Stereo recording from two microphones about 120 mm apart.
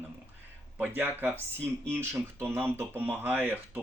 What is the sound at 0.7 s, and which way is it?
Speech, 15° right (ahead or behind).